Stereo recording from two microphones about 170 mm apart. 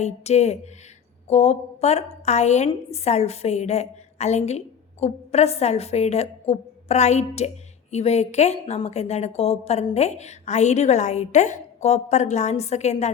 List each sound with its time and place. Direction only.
0.0 s a woman's voice: 40° left (ahead or behind)